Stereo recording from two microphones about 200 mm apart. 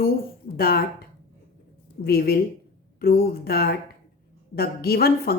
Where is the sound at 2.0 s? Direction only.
50° left (ahead or behind).